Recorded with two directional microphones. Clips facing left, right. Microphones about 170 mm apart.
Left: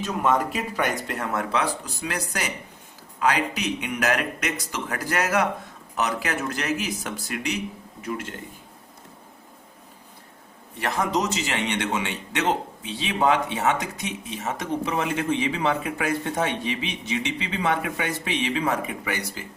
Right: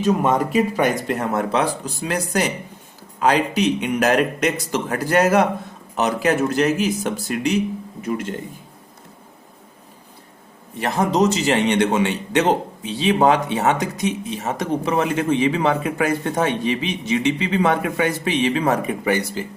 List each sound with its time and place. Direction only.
0.0 s a man's voice: 20° right (ahead or behind)
10.8 s a man's voice: 25° right (ahead or behind); by 19.1 s 40° right (ahead or behind)